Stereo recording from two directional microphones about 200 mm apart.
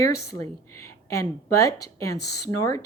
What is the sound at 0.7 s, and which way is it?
Speech, 15° left (ahead or behind).